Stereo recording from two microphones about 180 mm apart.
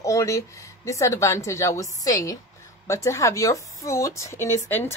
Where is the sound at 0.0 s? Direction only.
15° left (ahead or behind).